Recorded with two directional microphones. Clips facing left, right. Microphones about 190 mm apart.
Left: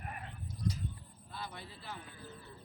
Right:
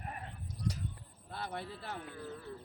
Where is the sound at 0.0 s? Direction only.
30° right (ahead or behind).